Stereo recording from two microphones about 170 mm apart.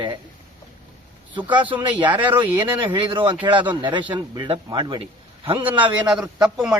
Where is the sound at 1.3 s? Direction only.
25° right (ahead or behind).